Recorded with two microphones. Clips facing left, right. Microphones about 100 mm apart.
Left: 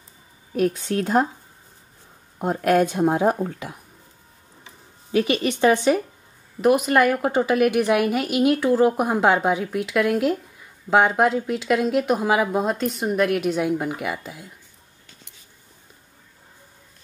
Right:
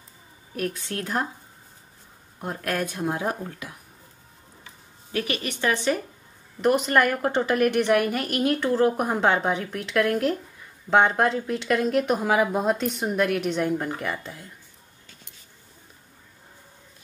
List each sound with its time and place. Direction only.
0.6 s speech: 20° left (ahead or behind)
2.3 s speech: 20° left (ahead or behind)
4.6 s a sound: 20° left (ahead or behind)
6.6 s a woman's voice: 5° left (ahead or behind)